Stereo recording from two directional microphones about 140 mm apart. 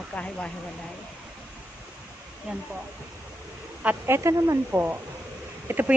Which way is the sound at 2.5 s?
5° right (ahead or behind).